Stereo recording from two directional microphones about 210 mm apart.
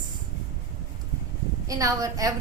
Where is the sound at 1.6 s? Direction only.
15° right (ahead or behind).